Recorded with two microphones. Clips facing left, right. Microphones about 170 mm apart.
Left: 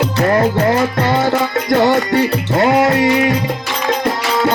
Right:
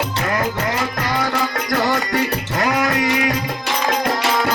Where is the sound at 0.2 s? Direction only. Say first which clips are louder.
Left 10 dB; 35° left (ahead or behind).